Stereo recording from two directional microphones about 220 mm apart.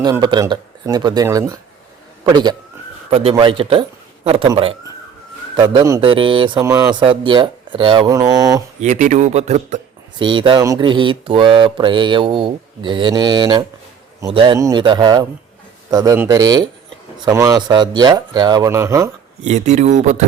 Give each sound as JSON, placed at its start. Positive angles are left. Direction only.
{"t": 0.0, "sound": "speech", "side_deg": -20}
{"t": 8.8, "sound": "a man's voice", "side_deg": -35}
{"t": 10.2, "sound": "speech", "side_deg": -20}
{"t": 19.5, "sound": "a man's voice", "side_deg": -30}